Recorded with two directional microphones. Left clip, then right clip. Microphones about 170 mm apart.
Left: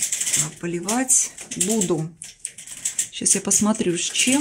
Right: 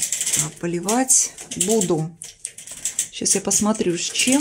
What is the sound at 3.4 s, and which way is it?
Speech, 15° right (ahead or behind).